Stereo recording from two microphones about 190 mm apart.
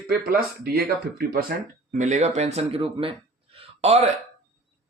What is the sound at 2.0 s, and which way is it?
Speech, 40° right (ahead or behind).